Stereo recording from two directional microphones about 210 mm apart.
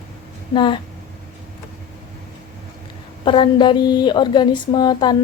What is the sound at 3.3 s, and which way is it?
Speech, 25° left (ahead or behind).